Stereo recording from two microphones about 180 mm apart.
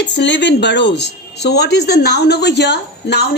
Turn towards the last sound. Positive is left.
turn(degrees=70)  # may be behind; listen again after turning